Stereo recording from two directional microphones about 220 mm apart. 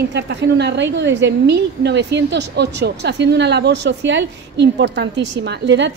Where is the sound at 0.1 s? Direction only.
50° right (ahead or behind).